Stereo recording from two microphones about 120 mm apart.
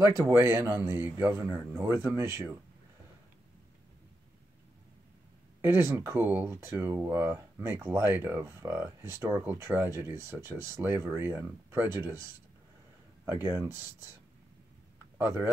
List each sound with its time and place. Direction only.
0.3 s a man's voice: 15° right (ahead or behind)
5.6 s speech: 20° right (ahead or behind)
13.2 s speech: 20° right (ahead or behind)
13.7 s speech: 30° left (ahead or behind)
15.1 s speech: 20° right (ahead or behind)